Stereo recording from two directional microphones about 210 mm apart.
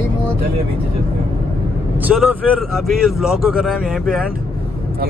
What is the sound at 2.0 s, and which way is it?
Speech, 5° right (ahead or behind).